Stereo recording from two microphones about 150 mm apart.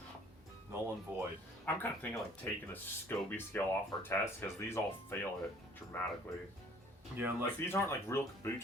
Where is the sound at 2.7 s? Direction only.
15° left (ahead or behind).